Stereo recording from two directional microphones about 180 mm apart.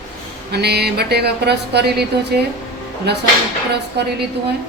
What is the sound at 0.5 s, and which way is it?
A woman's voice, 65° right (ahead or behind).